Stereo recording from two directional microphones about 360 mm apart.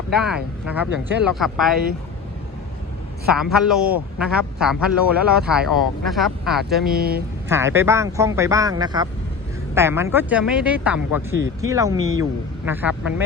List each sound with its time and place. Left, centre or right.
0.2 s speech: centre
3.3 s speech: centre
6.9 s speech: right
7.4 s speech: centre